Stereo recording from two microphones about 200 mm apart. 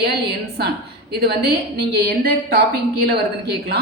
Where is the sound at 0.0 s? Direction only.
55° right (ahead or behind).